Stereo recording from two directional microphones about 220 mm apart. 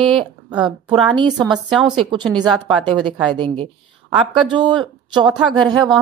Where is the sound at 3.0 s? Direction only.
20° right (ahead or behind).